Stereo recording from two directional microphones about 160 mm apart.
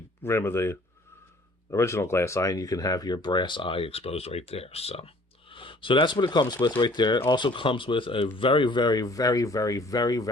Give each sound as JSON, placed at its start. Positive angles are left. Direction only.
{"t": 0.2, "sound": "speech", "side_deg": 15}